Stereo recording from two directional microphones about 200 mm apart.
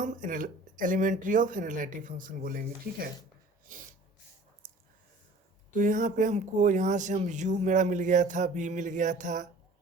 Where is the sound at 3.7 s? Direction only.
45° right (ahead or behind).